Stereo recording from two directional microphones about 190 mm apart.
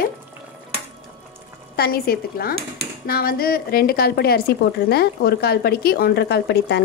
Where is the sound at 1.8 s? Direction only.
55° left (ahead or behind).